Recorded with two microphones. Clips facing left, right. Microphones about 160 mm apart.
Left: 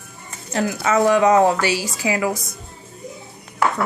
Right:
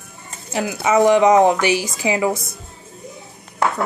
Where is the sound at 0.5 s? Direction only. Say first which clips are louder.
Right 2 dB; 15° right (ahead or behind).